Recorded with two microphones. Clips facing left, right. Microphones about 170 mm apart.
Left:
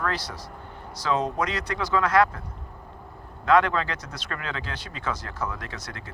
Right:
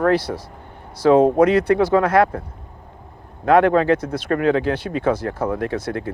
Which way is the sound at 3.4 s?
55° right (ahead or behind).